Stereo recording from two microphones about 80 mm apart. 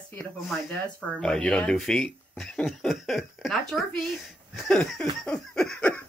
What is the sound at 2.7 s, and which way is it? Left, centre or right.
Speech, centre.